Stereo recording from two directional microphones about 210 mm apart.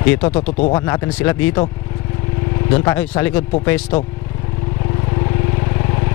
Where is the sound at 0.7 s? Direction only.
15° left (ahead or behind).